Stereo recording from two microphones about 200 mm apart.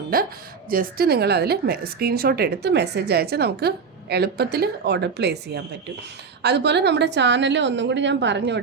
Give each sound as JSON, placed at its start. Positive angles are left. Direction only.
{"t": 0.1, "sound": "a woman's voice", "side_deg": -45}